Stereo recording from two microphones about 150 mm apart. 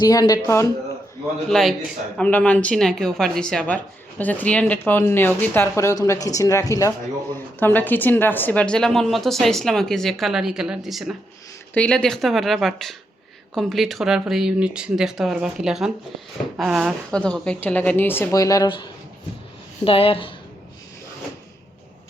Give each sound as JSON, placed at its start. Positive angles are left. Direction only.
{"t": 0.0, "sound": "speech", "side_deg": 25}
{"t": 1.5, "sound": "a woman's voice", "side_deg": 5}
{"t": 11.7, "sound": "a woman's voice", "side_deg": 10}
{"t": 19.8, "sound": "speech", "side_deg": 40}